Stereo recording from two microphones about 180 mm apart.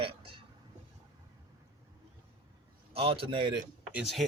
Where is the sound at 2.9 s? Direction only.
30° right (ahead or behind).